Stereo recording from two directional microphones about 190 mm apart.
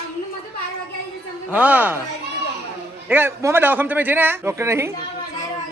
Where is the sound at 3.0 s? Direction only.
10° right (ahead or behind).